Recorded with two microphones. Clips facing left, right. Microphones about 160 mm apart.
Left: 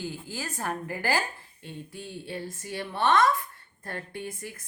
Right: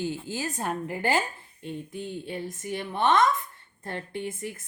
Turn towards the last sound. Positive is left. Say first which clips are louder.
# right 4 dB
turn(degrees=-25)  # may be behind; listen again after turning